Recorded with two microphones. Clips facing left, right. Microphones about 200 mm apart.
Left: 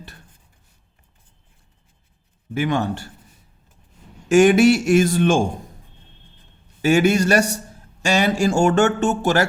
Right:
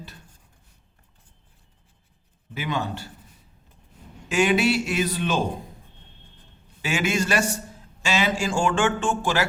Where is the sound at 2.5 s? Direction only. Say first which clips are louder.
Left 7 dB; 50° left (ahead or behind).